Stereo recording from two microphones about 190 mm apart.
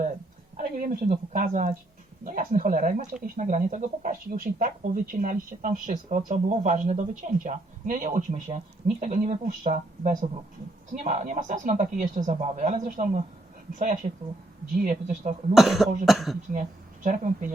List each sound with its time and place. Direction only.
0.5 s a sound: 50° right (ahead or behind)
1.1 s speech: 40° right (ahead or behind)
15.5 s speech: centre (ahead or behind)
16.5 s speech: 45° right (ahead or behind)